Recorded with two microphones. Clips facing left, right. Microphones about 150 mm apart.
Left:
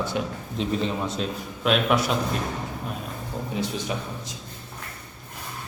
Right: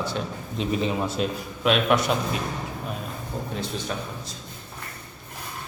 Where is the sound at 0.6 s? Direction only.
10° right (ahead or behind).